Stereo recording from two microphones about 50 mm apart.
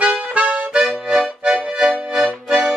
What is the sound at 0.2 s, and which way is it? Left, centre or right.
Music, right.